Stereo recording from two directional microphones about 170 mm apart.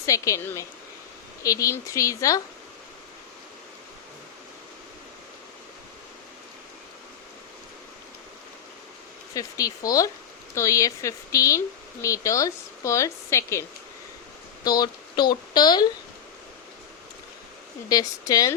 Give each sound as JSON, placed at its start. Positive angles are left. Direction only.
{"t": 0.0, "sound": "a woman's voice", "side_deg": 20}
{"t": 9.3, "sound": "a woman's voice", "side_deg": 20}
{"t": 17.8, "sound": "speech", "side_deg": 20}